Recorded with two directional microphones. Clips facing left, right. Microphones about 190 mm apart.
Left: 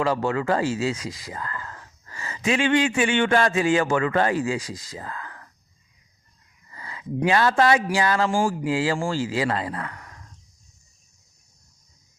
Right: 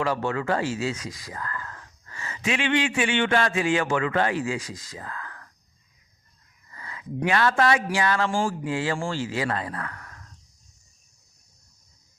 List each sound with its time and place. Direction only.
0.0 s speech: 35° left (ahead or behind)
6.7 s a sound: 30° left (ahead or behind)
7.2 s speech: 30° left (ahead or behind)
8.3 s speech: 10° left (ahead or behind)
8.6 s speech: 30° left (ahead or behind)